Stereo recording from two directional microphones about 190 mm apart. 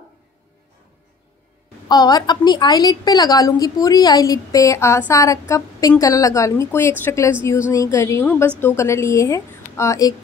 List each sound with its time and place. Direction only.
1.9 s a woman's voice: 20° left (ahead or behind)